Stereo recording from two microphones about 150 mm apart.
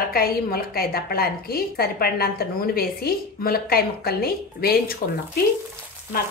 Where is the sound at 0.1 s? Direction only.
85° left.